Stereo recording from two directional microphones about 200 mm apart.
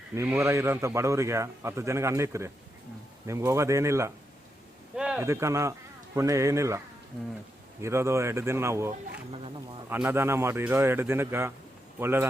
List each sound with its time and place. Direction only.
0.1 s a man's voice: 10° right (ahead or behind)
4.9 s a sound: 5° right (ahead or behind)
5.3 s a man's voice: 15° right (ahead or behind)
9.9 s a man's voice: 10° right (ahead or behind)